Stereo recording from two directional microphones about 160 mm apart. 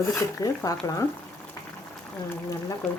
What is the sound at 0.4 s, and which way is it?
Speech, 20° left (ahead or behind).